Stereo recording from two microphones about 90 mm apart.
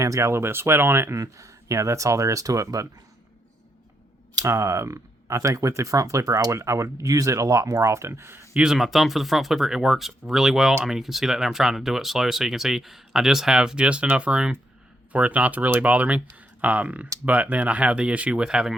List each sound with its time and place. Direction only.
0.0 s speech: 35° right (ahead or behind)
4.4 s speech: 35° right (ahead or behind)
8.5 s speech: 5° right (ahead or behind)